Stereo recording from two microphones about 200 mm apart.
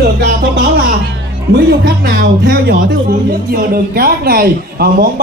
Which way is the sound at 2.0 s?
50° right (ahead or behind).